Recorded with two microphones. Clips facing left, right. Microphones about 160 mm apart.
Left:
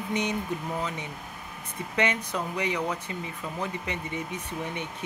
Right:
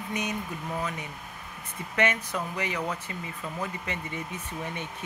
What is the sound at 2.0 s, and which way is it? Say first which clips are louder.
Speech: even; 15° left (ahead or behind).